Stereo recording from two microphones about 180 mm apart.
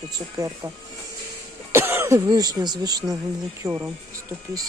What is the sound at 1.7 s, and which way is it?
Speech, 15° right (ahead or behind).